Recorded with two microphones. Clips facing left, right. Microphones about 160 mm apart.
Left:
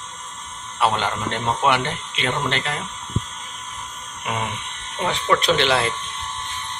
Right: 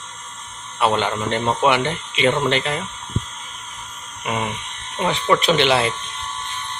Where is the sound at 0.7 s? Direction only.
Centre (ahead or behind).